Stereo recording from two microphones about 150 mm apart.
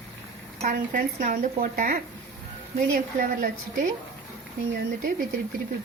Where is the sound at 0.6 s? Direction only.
65° right (ahead or behind).